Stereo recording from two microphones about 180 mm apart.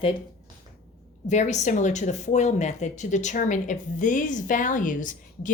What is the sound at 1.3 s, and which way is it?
Speech, 40° left (ahead or behind).